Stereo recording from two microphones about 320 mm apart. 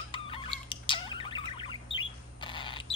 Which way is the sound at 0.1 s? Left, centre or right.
Centre.